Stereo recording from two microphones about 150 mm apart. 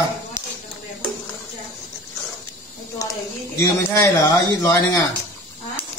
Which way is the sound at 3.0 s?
20° left (ahead or behind).